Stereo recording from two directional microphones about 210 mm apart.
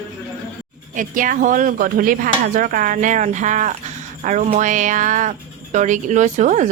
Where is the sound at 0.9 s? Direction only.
40° right (ahead or behind).